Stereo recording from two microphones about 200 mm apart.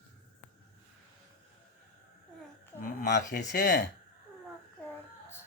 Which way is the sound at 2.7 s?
15° left (ahead or behind).